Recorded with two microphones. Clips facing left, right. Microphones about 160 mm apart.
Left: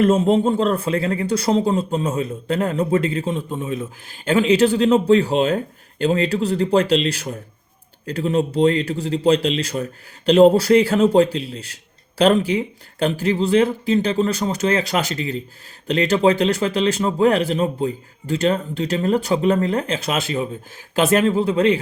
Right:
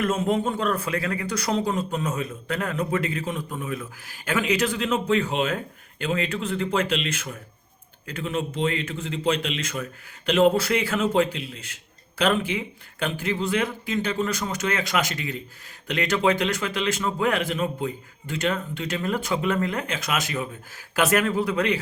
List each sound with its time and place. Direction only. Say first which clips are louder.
0.0 s a man's voice: left 8 dB; 30° left (ahead or behind)